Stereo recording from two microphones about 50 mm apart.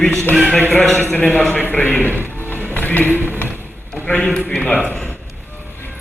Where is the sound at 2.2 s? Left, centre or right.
Right.